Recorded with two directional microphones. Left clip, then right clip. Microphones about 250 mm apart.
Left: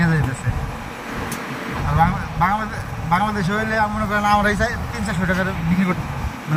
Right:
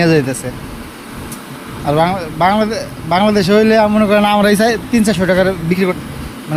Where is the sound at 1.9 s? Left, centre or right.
Right.